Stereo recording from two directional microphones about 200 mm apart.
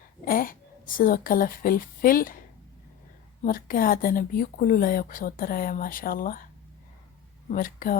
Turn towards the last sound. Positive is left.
turn(degrees=45)  # may be behind; listen again after turning